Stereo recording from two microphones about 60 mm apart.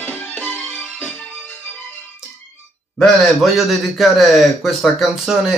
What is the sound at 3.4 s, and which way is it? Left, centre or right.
A man's voice, centre.